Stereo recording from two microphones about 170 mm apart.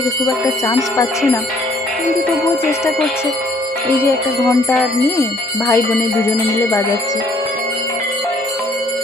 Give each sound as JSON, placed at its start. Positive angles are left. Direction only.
{"t": 0.4, "sound": "speech", "side_deg": 20}
{"t": 2.6, "sound": "music", "side_deg": 15}
{"t": 4.7, "sound": "music", "side_deg": 15}